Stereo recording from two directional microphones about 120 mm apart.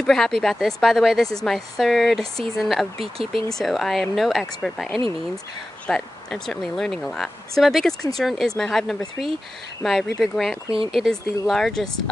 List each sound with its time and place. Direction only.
0.0 s a woman's voice: 5° left (ahead or behind)
3.0 s speech: 50° right (ahead or behind)
3.4 s a woman's voice: centre (ahead or behind)
10.7 s speech: 50° right (ahead or behind)
11.0 s a woman's voice: centre (ahead or behind)